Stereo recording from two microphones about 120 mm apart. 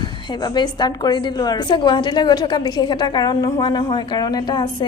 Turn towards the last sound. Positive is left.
turn(degrees=35)  # may be behind; listen again after turning